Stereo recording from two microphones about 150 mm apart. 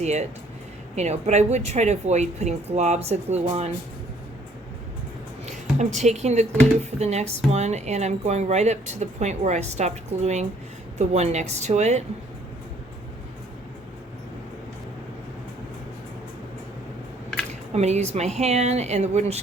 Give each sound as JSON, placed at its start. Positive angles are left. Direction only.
{"t": 0.0, "sound": "speech", "side_deg": -50}
{"t": 5.5, "sound": "a woman's voice", "side_deg": -50}
{"t": 17.7, "sound": "speech", "side_deg": -50}